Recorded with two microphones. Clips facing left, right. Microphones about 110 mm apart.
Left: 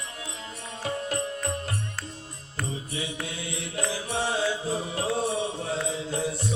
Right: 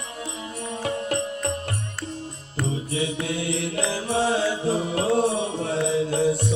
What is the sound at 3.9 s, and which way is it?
Music, 80° right.